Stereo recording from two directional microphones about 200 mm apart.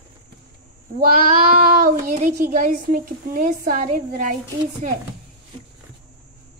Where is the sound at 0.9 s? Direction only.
45° right (ahead or behind).